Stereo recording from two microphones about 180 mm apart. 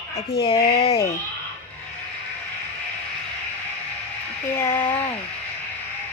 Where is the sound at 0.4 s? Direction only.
30° left (ahead or behind).